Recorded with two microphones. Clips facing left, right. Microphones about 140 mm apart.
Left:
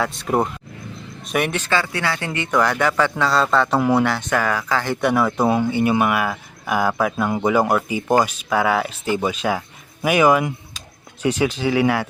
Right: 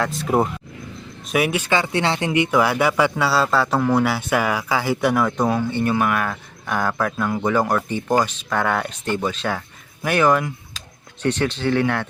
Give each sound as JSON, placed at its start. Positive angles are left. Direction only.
{"t": 0.0, "sound": "speech", "side_deg": 0}
{"t": 3.8, "sound": "speech", "side_deg": 5}
{"t": 4.0, "sound": "speech", "side_deg": -5}
{"t": 5.5, "sound": "speech", "side_deg": 10}